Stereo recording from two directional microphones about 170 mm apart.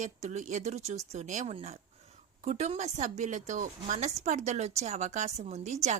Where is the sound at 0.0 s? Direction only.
45° right (ahead or behind).